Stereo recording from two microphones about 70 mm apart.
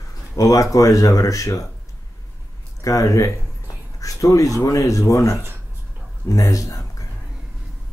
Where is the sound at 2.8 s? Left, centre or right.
Left.